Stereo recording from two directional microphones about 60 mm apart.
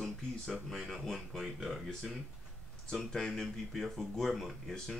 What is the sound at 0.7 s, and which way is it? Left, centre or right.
Music, centre.